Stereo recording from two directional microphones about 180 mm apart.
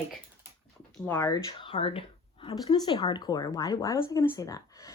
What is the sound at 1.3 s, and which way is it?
Speech, 25° left (ahead or behind).